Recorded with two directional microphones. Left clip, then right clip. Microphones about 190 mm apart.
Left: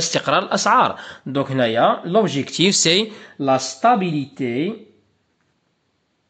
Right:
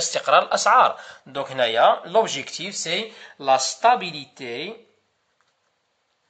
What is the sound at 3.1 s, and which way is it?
Speech, 25° left (ahead or behind).